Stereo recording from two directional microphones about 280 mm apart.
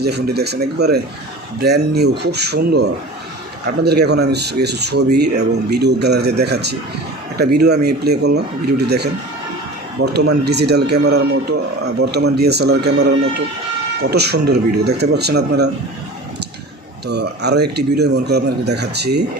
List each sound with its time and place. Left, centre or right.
0.0 s a man's voice: right
17.1 s a man's voice: right